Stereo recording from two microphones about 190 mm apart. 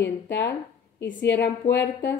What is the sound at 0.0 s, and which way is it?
A woman's voice, 65° left (ahead or behind).